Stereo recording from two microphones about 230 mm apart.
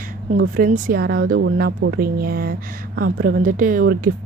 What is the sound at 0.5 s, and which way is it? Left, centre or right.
Speech, right.